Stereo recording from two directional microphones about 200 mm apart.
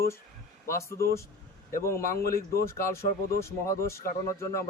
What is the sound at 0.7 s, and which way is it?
Speech, 15° left (ahead or behind).